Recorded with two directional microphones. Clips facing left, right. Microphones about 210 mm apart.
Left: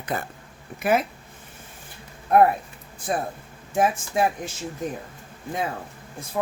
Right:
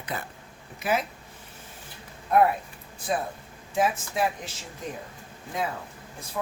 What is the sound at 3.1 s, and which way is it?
Speech, 55° left (ahead or behind).